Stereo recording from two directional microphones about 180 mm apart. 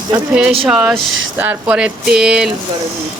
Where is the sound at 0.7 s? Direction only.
5° right (ahead or behind).